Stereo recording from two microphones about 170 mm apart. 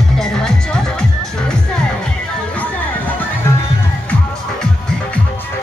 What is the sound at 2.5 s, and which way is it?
Music, 10° left (ahead or behind).